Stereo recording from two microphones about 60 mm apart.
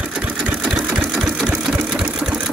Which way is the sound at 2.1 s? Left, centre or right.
Centre.